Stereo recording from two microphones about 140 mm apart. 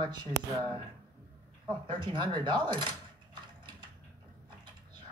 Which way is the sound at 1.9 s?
35° right (ahead or behind).